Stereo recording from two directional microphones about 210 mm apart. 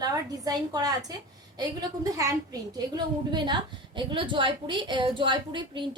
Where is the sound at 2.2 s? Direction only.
15° right (ahead or behind).